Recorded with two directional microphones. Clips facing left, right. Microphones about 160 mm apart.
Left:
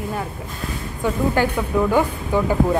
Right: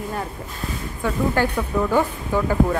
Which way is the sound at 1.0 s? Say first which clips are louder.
Left 2 dB; 20° left (ahead or behind).